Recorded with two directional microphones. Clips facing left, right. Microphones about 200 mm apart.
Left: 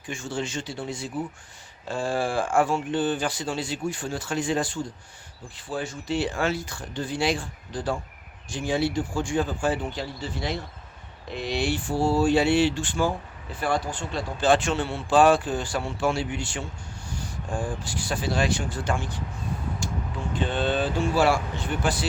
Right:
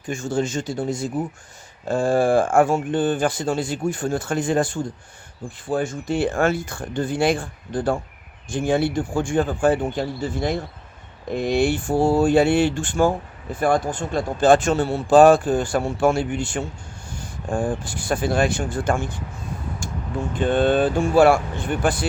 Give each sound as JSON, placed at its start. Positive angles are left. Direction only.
{"t": 0.1, "sound": "speech", "side_deg": -45}
{"t": 20.3, "sound": "speech", "side_deg": -50}